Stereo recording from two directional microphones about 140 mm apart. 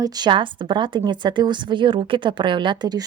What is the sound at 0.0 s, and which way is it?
A woman's voice, 30° right (ahead or behind).